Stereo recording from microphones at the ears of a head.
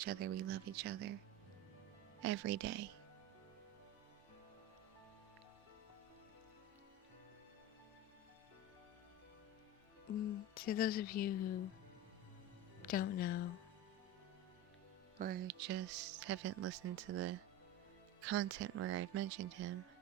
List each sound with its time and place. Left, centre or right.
0.0 s speech: right
2.2 s speech: right
10.1 s speech: left
12.8 s speech: left
15.2 s speech: right